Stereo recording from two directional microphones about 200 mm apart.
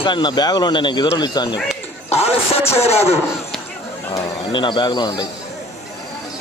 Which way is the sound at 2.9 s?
30° left (ahead or behind).